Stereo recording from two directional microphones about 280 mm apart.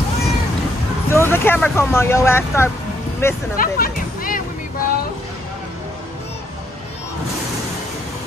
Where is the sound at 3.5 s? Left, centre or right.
Left.